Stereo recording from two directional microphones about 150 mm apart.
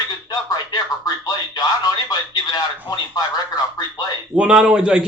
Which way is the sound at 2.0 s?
25° left (ahead or behind).